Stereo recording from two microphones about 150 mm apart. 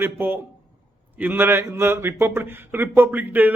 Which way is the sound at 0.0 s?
15° right (ahead or behind).